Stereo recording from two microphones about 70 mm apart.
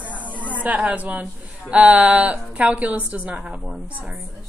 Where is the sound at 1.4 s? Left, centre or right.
Centre.